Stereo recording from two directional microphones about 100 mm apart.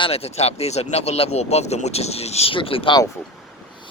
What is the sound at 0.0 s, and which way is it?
Speech, 90° left.